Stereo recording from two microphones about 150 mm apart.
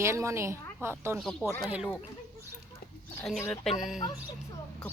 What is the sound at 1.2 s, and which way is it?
Speech, 5° left (ahead or behind).